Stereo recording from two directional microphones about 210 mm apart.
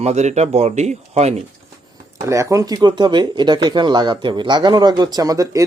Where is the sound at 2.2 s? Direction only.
15° right (ahead or behind).